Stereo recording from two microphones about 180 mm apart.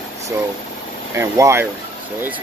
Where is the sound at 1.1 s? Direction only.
15° right (ahead or behind).